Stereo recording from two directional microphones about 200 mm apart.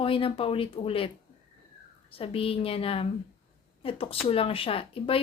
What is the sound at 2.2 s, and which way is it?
A woman's voice, 30° left (ahead or behind).